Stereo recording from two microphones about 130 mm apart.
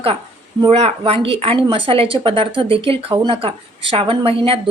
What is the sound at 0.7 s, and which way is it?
Speech, 50° right (ahead or behind).